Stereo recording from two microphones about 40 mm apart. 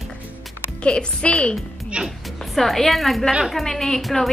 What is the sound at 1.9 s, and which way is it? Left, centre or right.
Speech, right.